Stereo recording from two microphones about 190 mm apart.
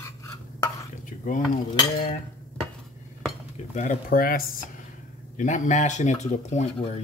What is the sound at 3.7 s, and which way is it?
Speech, 40° left (ahead or behind).